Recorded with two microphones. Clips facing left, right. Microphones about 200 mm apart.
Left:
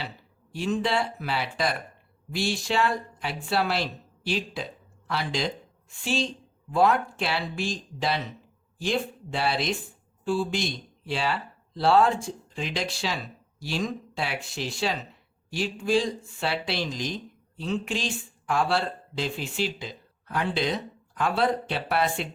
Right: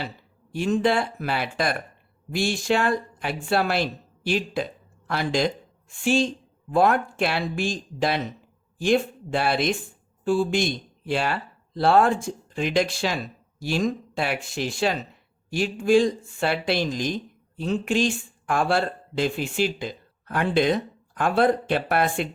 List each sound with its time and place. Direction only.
0.5 s speech: 50° right (ahead or behind)